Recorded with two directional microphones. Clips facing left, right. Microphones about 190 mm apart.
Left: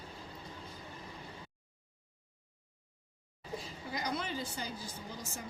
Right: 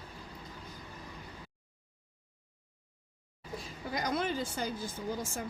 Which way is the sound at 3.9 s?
50° right (ahead or behind).